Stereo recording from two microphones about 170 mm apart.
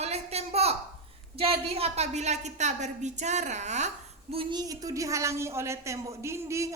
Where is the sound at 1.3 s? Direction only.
35° right (ahead or behind).